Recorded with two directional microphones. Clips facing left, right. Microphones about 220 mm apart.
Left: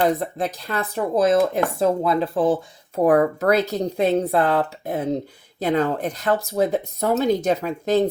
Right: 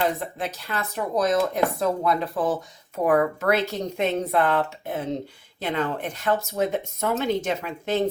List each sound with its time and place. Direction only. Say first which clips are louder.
0.0 s speech: left 5 dB; 35° left (ahead or behind)